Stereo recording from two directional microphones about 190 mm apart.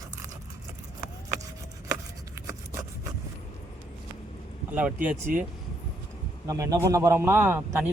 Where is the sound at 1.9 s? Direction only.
15° right (ahead or behind).